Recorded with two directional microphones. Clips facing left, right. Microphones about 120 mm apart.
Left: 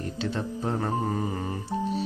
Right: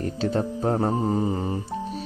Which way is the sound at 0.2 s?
40° right (ahead or behind).